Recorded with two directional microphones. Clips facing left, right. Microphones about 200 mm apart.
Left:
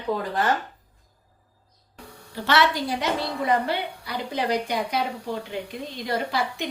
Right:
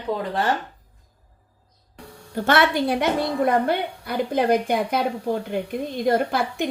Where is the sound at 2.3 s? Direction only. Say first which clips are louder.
Right 3 dB; 50° right (ahead or behind).